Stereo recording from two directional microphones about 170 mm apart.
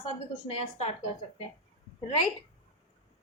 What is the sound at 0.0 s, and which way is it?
Speech, 35° left (ahead or behind).